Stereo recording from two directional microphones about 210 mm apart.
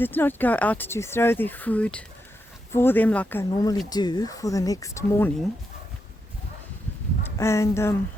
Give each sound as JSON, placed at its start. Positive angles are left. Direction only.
{"t": 0.0, "sound": "speech", "side_deg": 10}
{"t": 7.3, "sound": "speech", "side_deg": 15}